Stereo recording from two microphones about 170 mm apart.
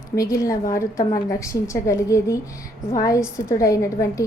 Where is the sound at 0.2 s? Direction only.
20° left (ahead or behind).